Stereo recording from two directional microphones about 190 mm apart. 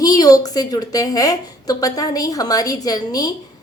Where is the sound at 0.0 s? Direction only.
20° left (ahead or behind).